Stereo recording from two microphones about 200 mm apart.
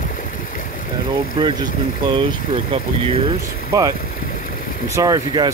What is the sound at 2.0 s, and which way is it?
Speech, 25° right (ahead or behind).